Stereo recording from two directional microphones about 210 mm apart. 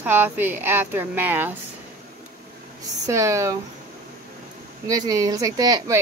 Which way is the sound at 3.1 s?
15° right (ahead or behind).